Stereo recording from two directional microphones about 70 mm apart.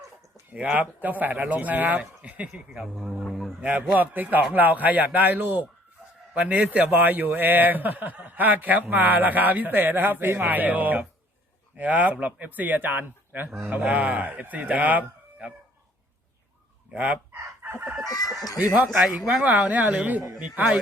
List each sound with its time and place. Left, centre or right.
0.5 s a man's voice: centre
2.7 s speech: centre
3.6 s a man's voice: right
16.9 s a man's voice: centre
17.6 s chicken: right
18.0 s chicken: left
19.0 s speech: centre
19.5 s a man's voice: right